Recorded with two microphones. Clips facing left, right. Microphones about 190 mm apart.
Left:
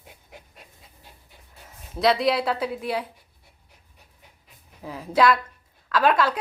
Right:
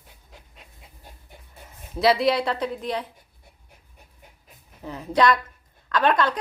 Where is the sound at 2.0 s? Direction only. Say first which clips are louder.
Right 1 dB; centre (ahead or behind).